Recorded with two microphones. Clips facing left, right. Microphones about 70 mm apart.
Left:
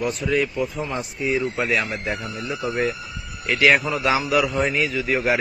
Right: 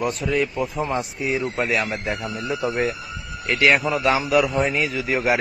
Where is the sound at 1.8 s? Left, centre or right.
Centre.